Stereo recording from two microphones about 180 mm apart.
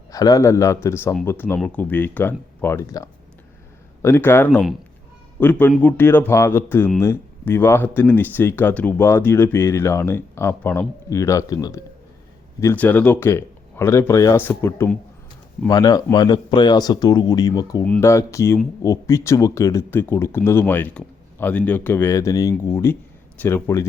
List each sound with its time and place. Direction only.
0.1 s speech: 20° left (ahead or behind)
17.8 s speech: 5° left (ahead or behind)
18.1 s speech: 15° left (ahead or behind)